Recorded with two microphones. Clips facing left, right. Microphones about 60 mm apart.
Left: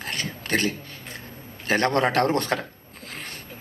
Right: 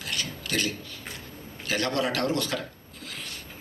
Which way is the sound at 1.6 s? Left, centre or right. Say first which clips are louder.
Left 6 dB; left.